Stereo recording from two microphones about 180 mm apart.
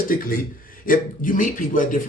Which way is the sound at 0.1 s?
50° left (ahead or behind).